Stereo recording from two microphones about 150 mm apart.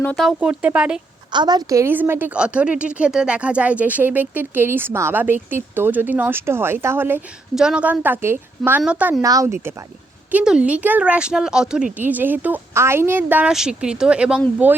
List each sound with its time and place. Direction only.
0.2 s a woman's voice: 5° right (ahead or behind)
1.3 s a woman's voice: 30° right (ahead or behind); by 9.2 s 10° right (ahead or behind)
9.2 s speech: 25° right (ahead or behind)
10.3 s a woman's voice: 5° right (ahead or behind)